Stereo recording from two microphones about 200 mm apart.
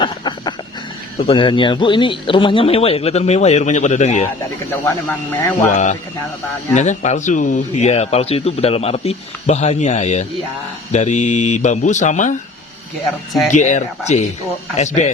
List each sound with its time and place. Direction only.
0.0 s a sound: 20° left (ahead or behind)
1.3 s speech: 25° left (ahead or behind)
4.9 s speech: 10° left (ahead or behind)
5.7 s speech: 40° left (ahead or behind)
13.5 s speech: 35° left (ahead or behind)